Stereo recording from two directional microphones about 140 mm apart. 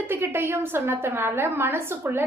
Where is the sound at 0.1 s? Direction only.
15° right (ahead or behind).